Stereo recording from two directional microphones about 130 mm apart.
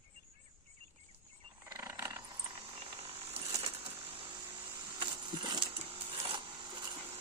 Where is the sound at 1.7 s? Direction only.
25° right (ahead or behind).